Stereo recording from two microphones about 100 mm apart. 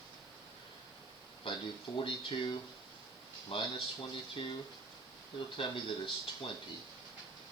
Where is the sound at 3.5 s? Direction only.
65° left (ahead or behind).